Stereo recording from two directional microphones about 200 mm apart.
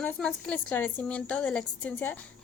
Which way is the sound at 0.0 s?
5° left (ahead or behind).